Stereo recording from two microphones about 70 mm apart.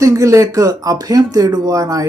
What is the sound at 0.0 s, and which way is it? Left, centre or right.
Speech, right.